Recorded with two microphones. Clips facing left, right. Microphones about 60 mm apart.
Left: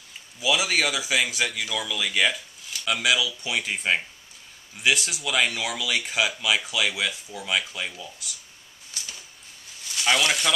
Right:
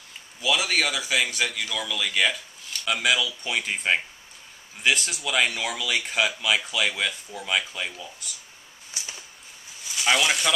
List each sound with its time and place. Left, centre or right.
0.4 s speech: centre
8.9 s a sound: right
9.8 s speech: centre